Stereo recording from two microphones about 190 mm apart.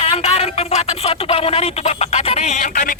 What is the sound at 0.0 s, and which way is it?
A man's voice, 30° left (ahead or behind).